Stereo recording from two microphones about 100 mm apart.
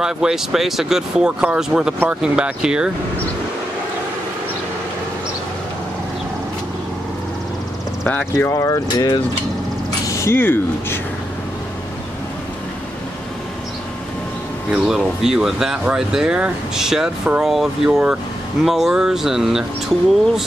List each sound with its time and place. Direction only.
0.0 s speech: 5° right (ahead or behind)
8.4 s speech: 35° left (ahead or behind)
10.0 s speech: 30° left (ahead or behind)
14.7 s speech: 5° right (ahead or behind)